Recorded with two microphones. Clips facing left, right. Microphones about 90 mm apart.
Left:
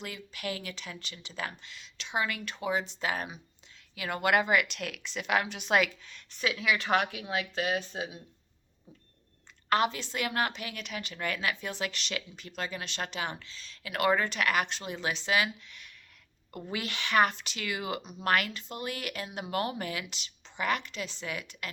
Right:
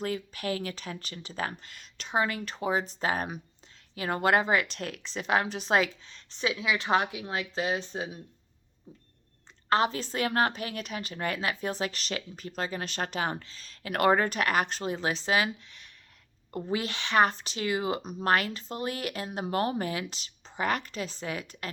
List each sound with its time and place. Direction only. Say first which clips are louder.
0.0 s a woman's voice: right 6 dB; 35° right (ahead or behind)
3.9 s a woman's voice: right 2 dB; 35° right (ahead or behind)
9.6 s a woman's voice: right 2 dB; 30° right (ahead or behind)